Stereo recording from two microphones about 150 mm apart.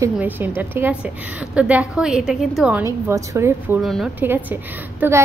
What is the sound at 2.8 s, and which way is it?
A woman's voice, 15° right (ahead or behind).